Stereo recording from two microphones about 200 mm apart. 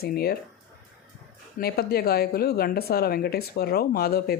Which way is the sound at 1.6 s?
50° left (ahead or behind).